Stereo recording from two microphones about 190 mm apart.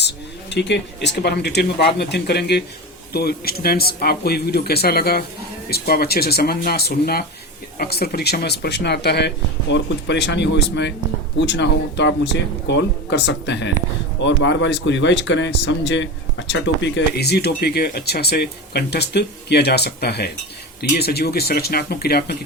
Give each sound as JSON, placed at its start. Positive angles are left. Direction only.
{"t": 0.5, "sound": "speech", "side_deg": 65}